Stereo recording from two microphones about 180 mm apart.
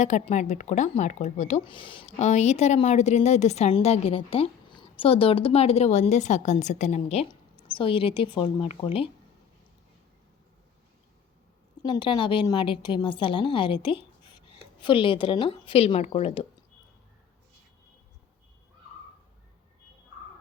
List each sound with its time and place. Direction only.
0.0 s a woman's voice: 40° left (ahead or behind)
11.8 s a woman's voice: 30° left (ahead or behind)